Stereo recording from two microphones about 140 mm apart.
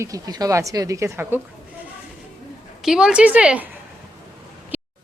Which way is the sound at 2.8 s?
5° right (ahead or behind).